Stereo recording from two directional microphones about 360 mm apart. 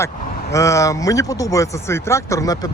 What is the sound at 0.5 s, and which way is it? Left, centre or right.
Speech, centre.